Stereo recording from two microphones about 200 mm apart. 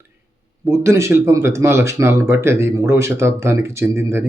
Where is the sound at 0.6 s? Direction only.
15° right (ahead or behind).